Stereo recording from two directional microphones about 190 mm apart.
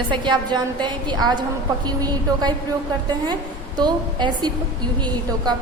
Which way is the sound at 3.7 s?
25° right (ahead or behind).